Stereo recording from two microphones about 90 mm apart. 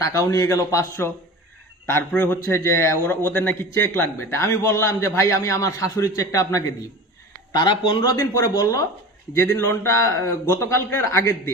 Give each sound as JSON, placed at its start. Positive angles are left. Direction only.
{"t": 0.0, "sound": "speech", "side_deg": 35}
{"t": 1.9, "sound": "a man's voice", "side_deg": 20}
{"t": 7.5, "sound": "speech", "side_deg": 55}
{"t": 8.2, "sound": "speech", "side_deg": 40}
{"t": 9.6, "sound": "speech", "side_deg": 30}